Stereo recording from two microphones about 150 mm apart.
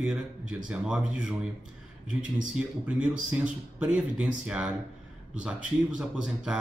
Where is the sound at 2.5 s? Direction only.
10° right (ahead or behind).